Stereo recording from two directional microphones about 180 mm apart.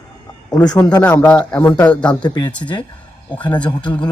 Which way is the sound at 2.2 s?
25° left (ahead or behind).